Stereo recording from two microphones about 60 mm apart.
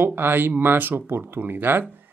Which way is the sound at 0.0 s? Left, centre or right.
Right.